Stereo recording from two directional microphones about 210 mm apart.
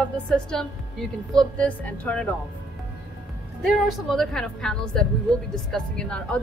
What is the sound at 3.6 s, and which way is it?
A woman's voice, centre (ahead or behind).